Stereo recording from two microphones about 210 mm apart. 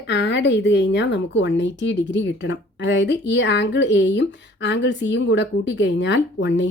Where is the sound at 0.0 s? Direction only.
55° left (ahead or behind).